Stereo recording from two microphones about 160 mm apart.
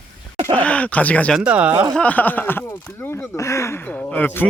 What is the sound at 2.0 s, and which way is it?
Speech, 10° left (ahead or behind).